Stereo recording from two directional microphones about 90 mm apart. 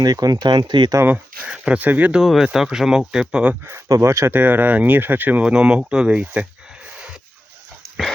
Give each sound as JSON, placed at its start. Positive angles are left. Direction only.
{"t": 0.0, "sound": "speech", "side_deg": -45}
{"t": 1.0, "sound": "speech", "side_deg": -15}
{"t": 2.2, "sound": "speech", "side_deg": -5}
{"t": 3.8, "sound": "speech", "side_deg": -35}
{"t": 4.4, "sound": "speech", "side_deg": -20}